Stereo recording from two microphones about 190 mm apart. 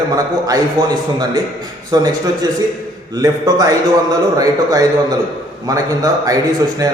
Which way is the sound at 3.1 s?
20° right (ahead or behind).